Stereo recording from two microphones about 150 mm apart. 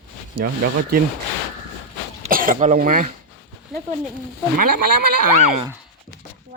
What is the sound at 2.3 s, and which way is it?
Speech, 70° right (ahead or behind).